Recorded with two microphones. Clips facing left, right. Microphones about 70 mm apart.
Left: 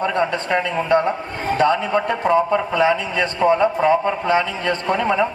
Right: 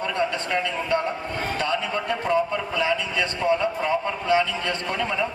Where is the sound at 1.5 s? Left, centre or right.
Left.